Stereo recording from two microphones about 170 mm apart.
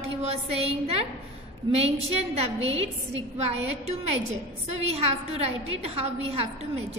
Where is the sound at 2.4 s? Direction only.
35° right (ahead or behind).